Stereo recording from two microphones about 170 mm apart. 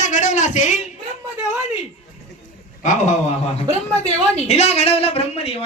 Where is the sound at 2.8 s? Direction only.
45° left (ahead or behind).